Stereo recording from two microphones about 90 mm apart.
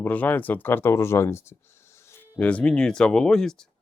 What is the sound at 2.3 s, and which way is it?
Speech, 15° left (ahead or behind).